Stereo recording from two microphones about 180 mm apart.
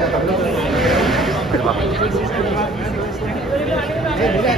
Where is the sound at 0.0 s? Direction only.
Centre (ahead or behind).